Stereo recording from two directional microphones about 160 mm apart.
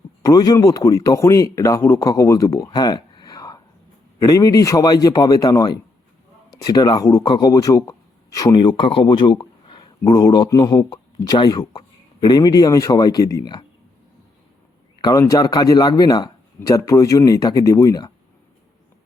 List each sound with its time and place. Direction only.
0.2 s a man's voice: 25° left (ahead or behind)
15.0 s a man's voice: 20° left (ahead or behind)